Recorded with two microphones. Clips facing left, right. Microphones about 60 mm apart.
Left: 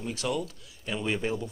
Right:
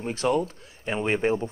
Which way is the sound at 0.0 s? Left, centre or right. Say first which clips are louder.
Right 7 dB; right.